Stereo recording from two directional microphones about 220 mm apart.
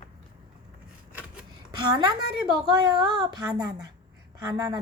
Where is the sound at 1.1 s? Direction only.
5° right (ahead or behind).